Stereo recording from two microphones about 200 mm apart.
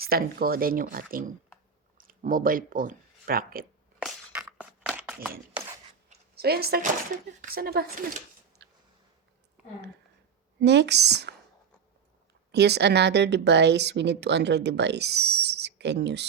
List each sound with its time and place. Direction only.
0.0 s speech: 50° right (ahead or behind)
4.0 s a sound: 5° right (ahead or behind)
6.3 s speech: 50° right (ahead or behind)
10.6 s speech: 60° right (ahead or behind)
12.5 s speech: 55° right (ahead or behind)